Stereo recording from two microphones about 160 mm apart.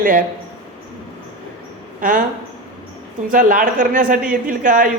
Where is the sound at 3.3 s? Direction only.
60° right (ahead or behind).